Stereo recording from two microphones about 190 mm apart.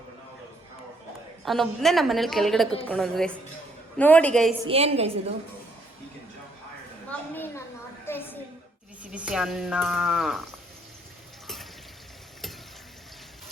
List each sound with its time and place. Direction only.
1.5 s a woman's voice: centre (ahead or behind)
4.6 s a woman's voice: 30° right (ahead or behind)
7.1 s a sound: 10° left (ahead or behind)
9.1 s speech: 5° right (ahead or behind)